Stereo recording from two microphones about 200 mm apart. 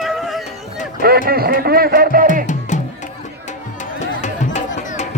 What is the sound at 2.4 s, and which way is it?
Music, 40° left (ahead or behind).